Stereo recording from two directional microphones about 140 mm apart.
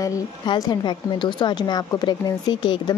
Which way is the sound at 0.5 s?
30° left (ahead or behind).